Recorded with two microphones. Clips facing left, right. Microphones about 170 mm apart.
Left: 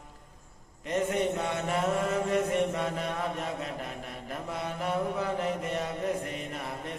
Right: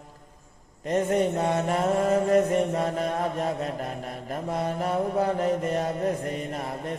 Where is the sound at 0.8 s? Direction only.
40° right (ahead or behind).